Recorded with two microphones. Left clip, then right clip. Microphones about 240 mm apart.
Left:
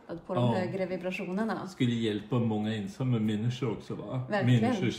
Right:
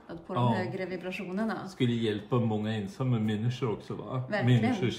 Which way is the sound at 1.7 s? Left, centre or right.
Centre.